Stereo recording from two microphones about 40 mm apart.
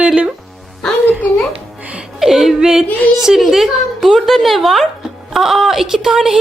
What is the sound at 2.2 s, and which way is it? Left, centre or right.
A woman's voice, centre.